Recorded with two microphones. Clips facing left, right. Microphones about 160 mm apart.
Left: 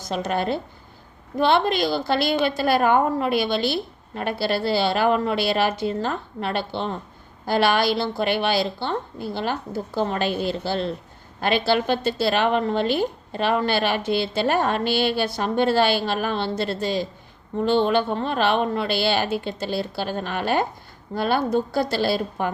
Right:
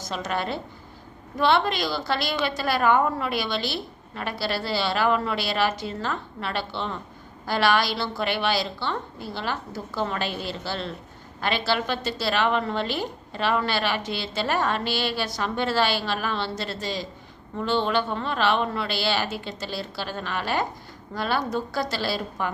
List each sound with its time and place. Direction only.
0.2 s a woman's voice: 45° left (ahead or behind)